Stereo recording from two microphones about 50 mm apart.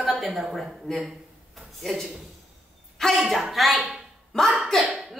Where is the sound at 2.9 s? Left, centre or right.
Centre.